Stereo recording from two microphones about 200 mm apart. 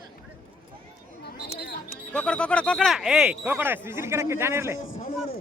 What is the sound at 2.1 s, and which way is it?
Speech, 5° left (ahead or behind).